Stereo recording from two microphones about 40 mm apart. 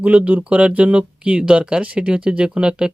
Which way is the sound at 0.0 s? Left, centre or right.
Right.